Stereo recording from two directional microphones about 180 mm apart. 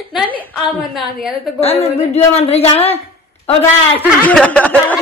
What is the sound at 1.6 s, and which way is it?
Speech, 35° left (ahead or behind).